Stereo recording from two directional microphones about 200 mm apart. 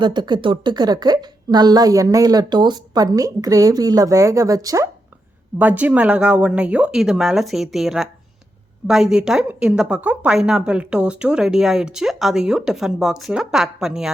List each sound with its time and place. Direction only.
0.0 s a woman's voice: 20° right (ahead or behind); by 14.1 s 5° right (ahead or behind)